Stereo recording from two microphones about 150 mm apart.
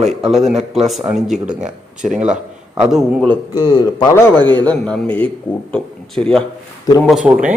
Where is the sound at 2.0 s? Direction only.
55° right (ahead or behind).